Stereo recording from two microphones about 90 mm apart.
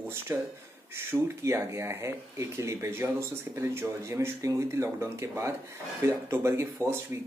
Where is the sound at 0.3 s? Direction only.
35° right (ahead or behind).